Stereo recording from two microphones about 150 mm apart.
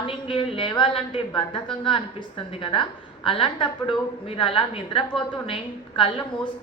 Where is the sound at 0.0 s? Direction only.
35° left (ahead or behind).